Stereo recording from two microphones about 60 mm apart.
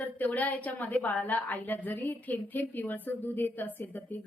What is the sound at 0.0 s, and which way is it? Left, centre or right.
A woman's voice, left.